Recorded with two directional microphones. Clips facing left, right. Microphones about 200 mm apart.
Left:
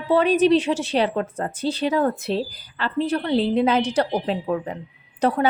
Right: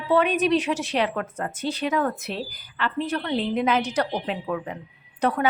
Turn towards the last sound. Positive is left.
turn(degrees=30)  # may be behind; listen again after turning